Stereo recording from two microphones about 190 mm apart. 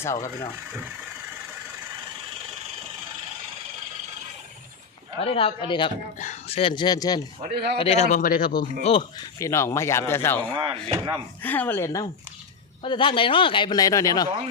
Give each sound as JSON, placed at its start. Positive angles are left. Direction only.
{"t": 0.0, "sound": "speech", "side_deg": 15}
{"t": 5.2, "sound": "speech", "side_deg": 30}
{"t": 6.1, "sound": "speech", "side_deg": 40}
{"t": 7.5, "sound": "a man's voice", "side_deg": -60}
{"t": 7.8, "sound": "a man's voice", "side_deg": 35}
{"t": 8.8, "sound": "speech", "side_deg": 30}
{"t": 9.4, "sound": "speech", "side_deg": 15}
{"t": 10.8, "sound": "speech", "side_deg": -25}
{"t": 11.4, "sound": "speech", "side_deg": 10}
{"t": 12.8, "sound": "speech", "side_deg": 25}